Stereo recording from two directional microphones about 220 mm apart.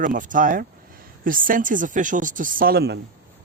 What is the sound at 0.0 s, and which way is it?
A man's voice, 35° right (ahead or behind).